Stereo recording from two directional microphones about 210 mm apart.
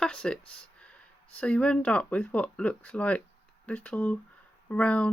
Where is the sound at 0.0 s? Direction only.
5° left (ahead or behind).